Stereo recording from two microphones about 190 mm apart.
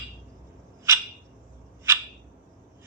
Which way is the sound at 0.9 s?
15° right (ahead or behind).